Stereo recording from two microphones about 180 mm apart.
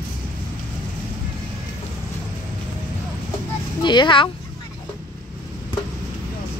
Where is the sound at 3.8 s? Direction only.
25° left (ahead or behind).